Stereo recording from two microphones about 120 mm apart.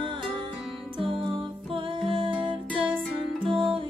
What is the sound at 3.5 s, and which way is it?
Music, 45° right (ahead or behind).